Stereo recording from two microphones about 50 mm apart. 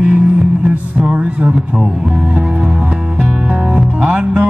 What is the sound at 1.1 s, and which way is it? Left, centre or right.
Speech, right.